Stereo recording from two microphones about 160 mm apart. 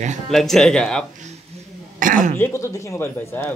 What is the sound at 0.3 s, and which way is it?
Speech, centre (ahead or behind).